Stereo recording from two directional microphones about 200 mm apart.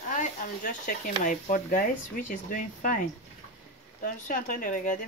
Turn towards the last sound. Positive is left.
turn(degrees=40)  # may be behind; listen again after turning